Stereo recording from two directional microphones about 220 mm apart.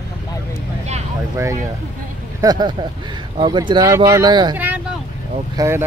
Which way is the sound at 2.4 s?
15° right (ahead or behind).